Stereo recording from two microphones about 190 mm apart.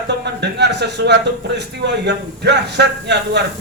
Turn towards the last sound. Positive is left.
turn(degrees=-65)  # may be behind; listen again after turning